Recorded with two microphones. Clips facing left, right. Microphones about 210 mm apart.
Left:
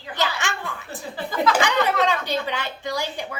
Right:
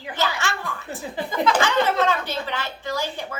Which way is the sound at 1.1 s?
20° right (ahead or behind).